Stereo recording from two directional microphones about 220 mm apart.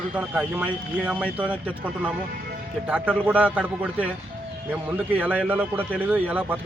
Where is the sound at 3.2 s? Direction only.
5° right (ahead or behind).